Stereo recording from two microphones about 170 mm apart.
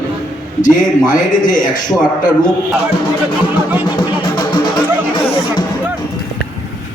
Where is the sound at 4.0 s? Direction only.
25° left (ahead or behind).